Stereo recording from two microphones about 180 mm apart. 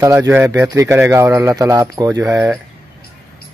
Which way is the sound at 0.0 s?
15° right (ahead or behind).